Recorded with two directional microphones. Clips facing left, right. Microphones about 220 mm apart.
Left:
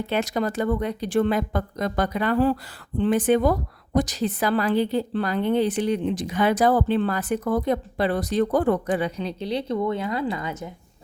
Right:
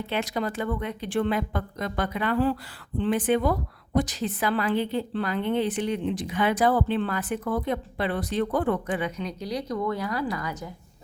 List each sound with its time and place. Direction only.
0.1 s speech: 45° left (ahead or behind); by 10.7 s 25° left (ahead or behind)